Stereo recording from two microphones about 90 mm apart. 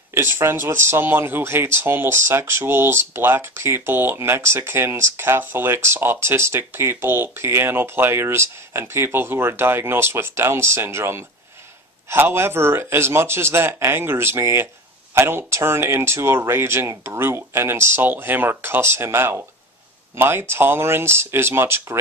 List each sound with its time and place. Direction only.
0.1 s speech: 25° right (ahead or behind)